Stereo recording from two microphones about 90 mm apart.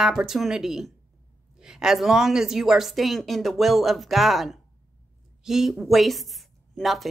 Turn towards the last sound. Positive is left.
turn(degrees=0)  # may be behind; listen again after turning